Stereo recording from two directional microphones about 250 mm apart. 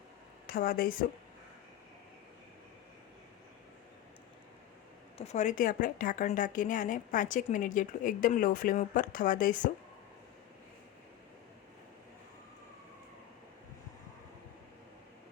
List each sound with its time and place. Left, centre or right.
0.4 s speech: left
5.1 s a woman's voice: left